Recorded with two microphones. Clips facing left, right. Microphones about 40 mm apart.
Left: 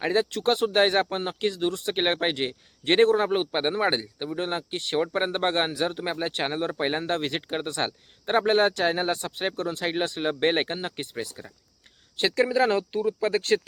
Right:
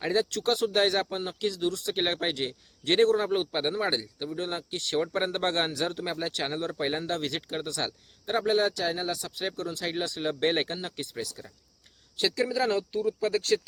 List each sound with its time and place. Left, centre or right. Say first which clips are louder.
0.0 s speech: left 3 dB; left